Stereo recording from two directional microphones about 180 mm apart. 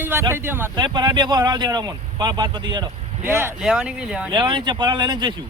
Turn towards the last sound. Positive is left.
turn(degrees=-25)  # may be behind; listen again after turning